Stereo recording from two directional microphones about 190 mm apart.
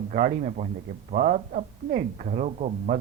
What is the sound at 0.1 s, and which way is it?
A man's voice, 40° right (ahead or behind).